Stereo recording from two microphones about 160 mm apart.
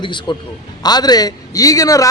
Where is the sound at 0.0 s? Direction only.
30° left (ahead or behind).